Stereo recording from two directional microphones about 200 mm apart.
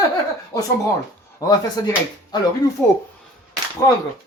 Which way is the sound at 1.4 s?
20° left (ahead or behind).